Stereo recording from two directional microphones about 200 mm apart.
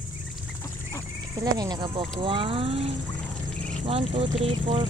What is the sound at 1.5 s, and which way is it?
Speech, 20° right (ahead or behind).